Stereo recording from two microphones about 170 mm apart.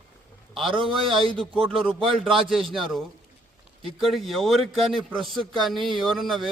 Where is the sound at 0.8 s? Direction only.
30° right (ahead or behind).